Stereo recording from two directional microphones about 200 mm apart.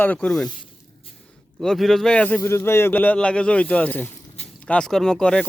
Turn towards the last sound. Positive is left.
turn(degrees=5)  # may be behind; listen again after turning